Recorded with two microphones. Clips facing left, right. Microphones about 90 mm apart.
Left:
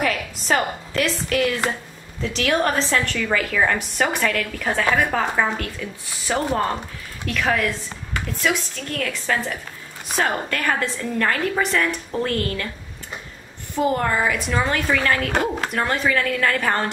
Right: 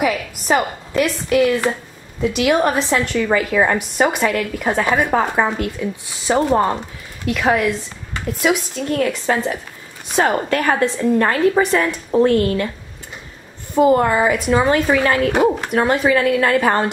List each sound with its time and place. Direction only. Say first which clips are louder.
0.0 s a woman's voice: right 4 dB; 10° right (ahead or behind)
13.9 s a woman's voice: right 6 dB; 15° right (ahead or behind)